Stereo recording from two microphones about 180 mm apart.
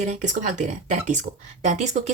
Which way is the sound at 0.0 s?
40° right (ahead or behind).